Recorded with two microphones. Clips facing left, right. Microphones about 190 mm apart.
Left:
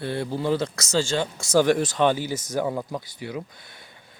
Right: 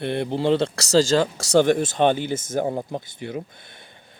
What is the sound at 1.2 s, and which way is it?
Speech, 80° right.